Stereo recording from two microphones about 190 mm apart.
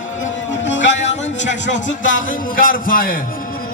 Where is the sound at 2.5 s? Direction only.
45° left (ahead or behind).